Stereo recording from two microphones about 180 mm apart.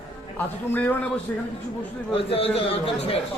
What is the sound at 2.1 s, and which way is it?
A man's voice, 30° left (ahead or behind).